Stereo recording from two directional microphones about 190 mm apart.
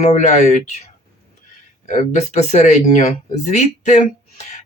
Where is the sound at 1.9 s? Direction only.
40° left (ahead or behind).